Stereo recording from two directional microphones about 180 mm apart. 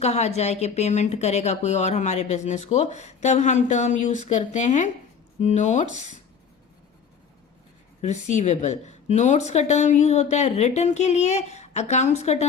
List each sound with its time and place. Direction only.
0.0 s speech: 35° left (ahead or behind)
8.0 s speech: 40° left (ahead or behind)